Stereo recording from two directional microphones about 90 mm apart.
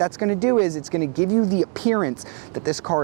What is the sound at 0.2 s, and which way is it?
Speech, 15° right (ahead or behind).